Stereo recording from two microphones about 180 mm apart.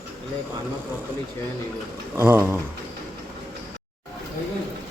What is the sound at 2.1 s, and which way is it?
Speech, 15° right (ahead or behind).